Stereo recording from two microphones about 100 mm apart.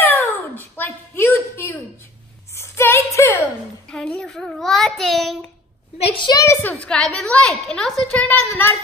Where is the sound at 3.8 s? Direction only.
5° left (ahead or behind).